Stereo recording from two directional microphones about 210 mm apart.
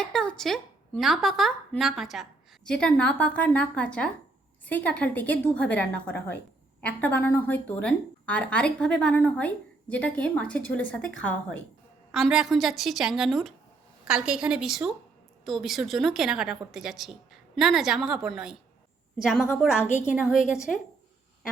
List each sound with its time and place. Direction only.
0.0 s a woman's voice: centre (ahead or behind)
19.9 s a woman's voice: 35° left (ahead or behind)
20.7 s a woman's voice: 5° left (ahead or behind)